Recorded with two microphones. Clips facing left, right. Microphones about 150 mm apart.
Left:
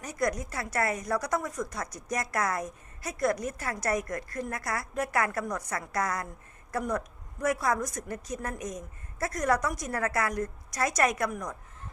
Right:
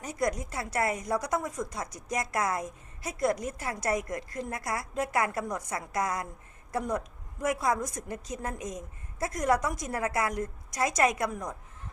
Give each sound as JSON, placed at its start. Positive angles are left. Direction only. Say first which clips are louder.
{"t": 0.0, "sound": "a woman's voice", "louder": "even", "side_deg": -25}